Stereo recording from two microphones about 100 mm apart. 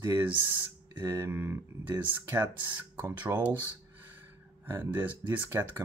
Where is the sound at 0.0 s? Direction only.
25° right (ahead or behind).